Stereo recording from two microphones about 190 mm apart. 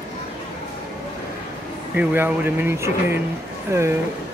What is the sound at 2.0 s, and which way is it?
Speech, 10° right (ahead or behind).